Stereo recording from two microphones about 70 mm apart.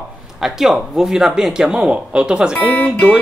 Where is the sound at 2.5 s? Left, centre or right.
Left.